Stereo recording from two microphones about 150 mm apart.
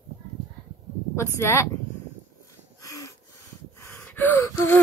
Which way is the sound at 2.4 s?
20° left (ahead or behind).